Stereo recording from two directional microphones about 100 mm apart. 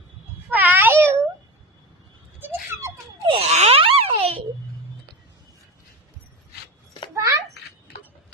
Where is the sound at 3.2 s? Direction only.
85° right.